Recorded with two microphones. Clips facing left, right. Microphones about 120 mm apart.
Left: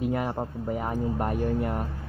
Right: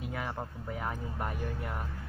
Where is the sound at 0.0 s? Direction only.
55° left (ahead or behind).